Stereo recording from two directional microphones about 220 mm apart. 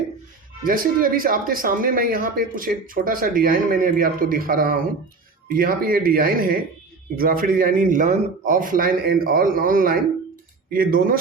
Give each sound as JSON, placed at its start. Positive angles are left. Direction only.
{"t": 0.6, "sound": "speech", "side_deg": -40}